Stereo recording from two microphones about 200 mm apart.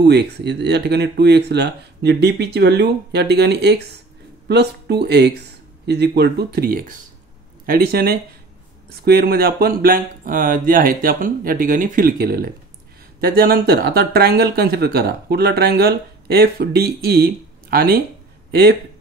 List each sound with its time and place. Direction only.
0.0 s speech: 55° right (ahead or behind)